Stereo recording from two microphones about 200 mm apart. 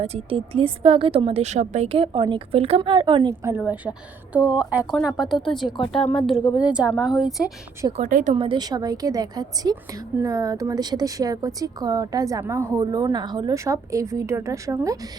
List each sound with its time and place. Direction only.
0.0 s a woman's voice: 30° right (ahead or behind)
3.4 s speech: 10° right (ahead or behind)
7.9 s a woman's voice: 40° right (ahead or behind); by 14.9 s 15° right (ahead or behind)